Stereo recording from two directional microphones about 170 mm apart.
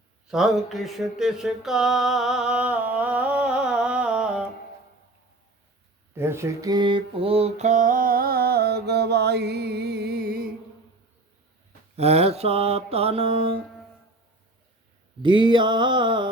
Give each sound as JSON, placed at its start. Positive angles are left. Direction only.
{"t": 0.3, "sound": "a sound", "side_deg": 0}
{"t": 6.1, "sound": "mantra", "side_deg": -15}
{"t": 11.9, "sound": "mantra", "side_deg": -35}
{"t": 15.2, "sound": "mantra", "side_deg": -30}